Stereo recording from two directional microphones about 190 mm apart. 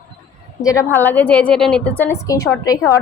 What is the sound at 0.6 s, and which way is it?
A woman's voice, 15° left (ahead or behind).